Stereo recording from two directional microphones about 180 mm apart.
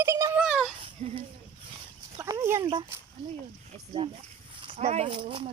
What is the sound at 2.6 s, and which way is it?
Speech, 30° right (ahead or behind).